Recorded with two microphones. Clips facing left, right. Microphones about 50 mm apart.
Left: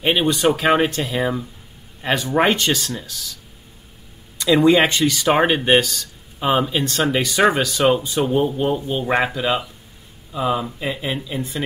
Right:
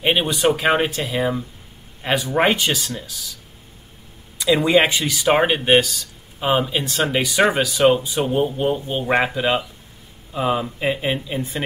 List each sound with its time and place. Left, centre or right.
0.0 s speech: centre
4.4 s speech: centre; by 11.6 s right